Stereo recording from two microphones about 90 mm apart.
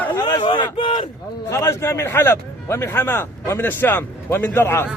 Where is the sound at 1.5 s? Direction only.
35° left (ahead or behind).